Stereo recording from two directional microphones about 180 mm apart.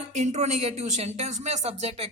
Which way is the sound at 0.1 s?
40° right (ahead or behind).